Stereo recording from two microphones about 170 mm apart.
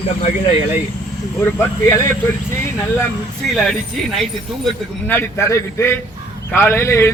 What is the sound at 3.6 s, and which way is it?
Speech, centre (ahead or behind).